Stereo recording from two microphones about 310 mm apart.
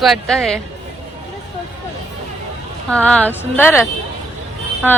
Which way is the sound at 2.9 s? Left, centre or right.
Centre.